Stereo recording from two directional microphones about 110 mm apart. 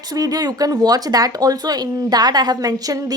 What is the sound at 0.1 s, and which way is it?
Speech, 35° right (ahead or behind).